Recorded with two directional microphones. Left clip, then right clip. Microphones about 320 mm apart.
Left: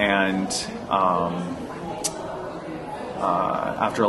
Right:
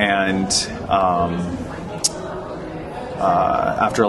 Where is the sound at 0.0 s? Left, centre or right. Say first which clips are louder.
Right 3 dB; centre.